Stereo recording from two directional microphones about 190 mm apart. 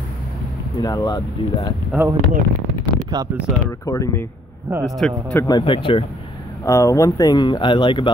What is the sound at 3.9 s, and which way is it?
Speech, 15° left (ahead or behind).